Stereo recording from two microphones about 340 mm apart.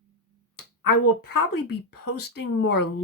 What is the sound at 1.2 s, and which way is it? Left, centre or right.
Speech, left.